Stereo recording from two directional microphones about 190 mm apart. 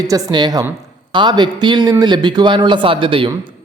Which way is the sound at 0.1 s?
20° right (ahead or behind).